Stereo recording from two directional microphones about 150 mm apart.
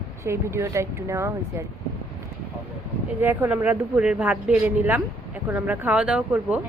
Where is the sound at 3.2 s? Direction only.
15° right (ahead or behind).